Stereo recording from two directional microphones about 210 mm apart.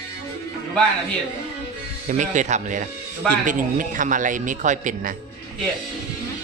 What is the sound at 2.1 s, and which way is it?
A man's voice, 35° right (ahead or behind).